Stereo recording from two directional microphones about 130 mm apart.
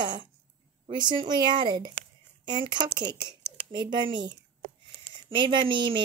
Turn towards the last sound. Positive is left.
turn(degrees=-40)  # may be behind; listen again after turning